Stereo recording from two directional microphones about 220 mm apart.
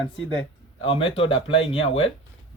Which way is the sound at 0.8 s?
25° left (ahead or behind).